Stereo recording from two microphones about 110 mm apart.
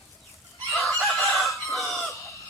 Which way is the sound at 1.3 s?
Centre (ahead or behind).